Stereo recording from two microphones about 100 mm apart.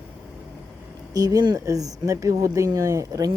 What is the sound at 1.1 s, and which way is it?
Speech, 40° right (ahead or behind).